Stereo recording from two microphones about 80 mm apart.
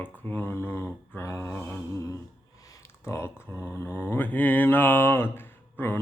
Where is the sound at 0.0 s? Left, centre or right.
Left.